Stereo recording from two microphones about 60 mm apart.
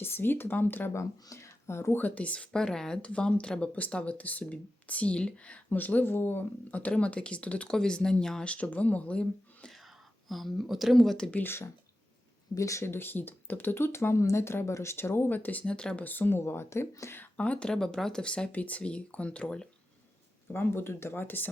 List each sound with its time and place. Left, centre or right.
0.0 s speech: left
0.9 s speech: left
2.0 s speech: left; by 3.0 s centre
3.0 s speech: centre
5.7 s speech: left
10.2 s speech: centre
11.4 s speech: left
12.5 s speech: left
12.8 s speech: left
15.6 s speech: centre
16.0 s speech: left
16.4 s speech: left
17.3 s speech: left
20.5 s speech: left